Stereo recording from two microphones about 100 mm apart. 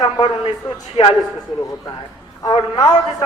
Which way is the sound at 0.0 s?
65° left (ahead or behind).